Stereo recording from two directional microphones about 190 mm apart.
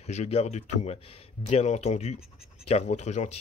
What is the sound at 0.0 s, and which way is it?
Speech, 35° left (ahead or behind).